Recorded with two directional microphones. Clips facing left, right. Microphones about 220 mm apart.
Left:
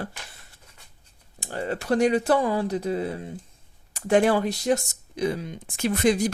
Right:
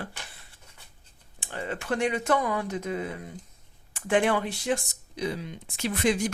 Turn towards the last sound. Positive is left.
turn(degrees=40)  # may be behind; listen again after turning